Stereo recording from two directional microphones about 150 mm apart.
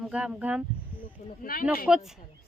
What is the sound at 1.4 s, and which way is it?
Speech, 75° left (ahead or behind).